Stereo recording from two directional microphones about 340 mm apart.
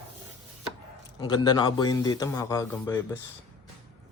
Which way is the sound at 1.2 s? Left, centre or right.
Centre.